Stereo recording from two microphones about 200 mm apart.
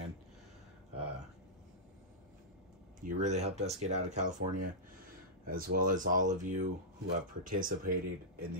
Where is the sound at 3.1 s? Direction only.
35° right (ahead or behind).